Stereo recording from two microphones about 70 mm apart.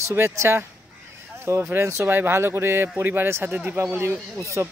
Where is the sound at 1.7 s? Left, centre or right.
Right.